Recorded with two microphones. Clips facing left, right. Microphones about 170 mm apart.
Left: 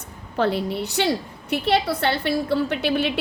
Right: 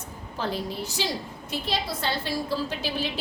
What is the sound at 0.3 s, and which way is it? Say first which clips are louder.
A woman's voice: left 8 dB; 65° left (ahead or behind).